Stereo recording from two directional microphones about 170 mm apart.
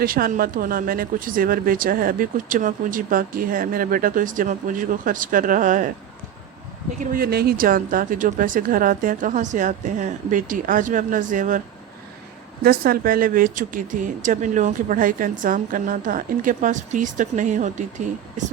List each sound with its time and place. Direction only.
0.0 s speech: 60° right (ahead or behind)
7.0 s speech: 60° right (ahead or behind)
12.6 s speech: 60° right (ahead or behind)